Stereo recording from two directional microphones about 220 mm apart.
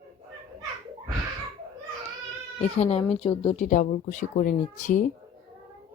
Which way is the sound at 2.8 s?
30° left (ahead or behind).